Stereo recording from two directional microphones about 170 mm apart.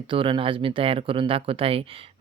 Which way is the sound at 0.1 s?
30° right (ahead or behind).